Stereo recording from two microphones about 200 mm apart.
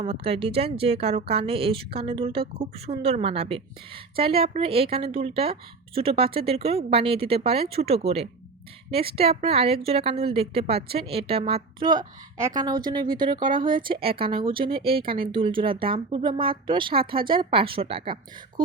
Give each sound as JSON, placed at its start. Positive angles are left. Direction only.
{"t": 0.0, "sound": "a woman's voice", "side_deg": -30}
{"t": 12.4, "sound": "a woman's voice", "side_deg": -15}